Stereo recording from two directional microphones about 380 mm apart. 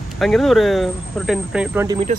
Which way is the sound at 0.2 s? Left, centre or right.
Centre.